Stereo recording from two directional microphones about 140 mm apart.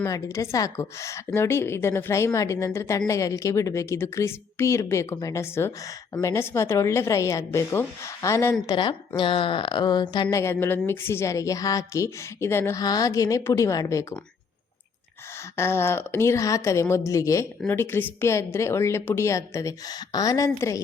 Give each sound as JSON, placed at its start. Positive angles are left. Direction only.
{"t": 0.0, "sound": "a woman's voice", "side_deg": 20}
{"t": 8.6, "sound": "a woman's voice", "side_deg": 35}
{"t": 10.3, "sound": "a woman's voice", "side_deg": 20}
{"t": 15.5, "sound": "a woman's voice", "side_deg": 20}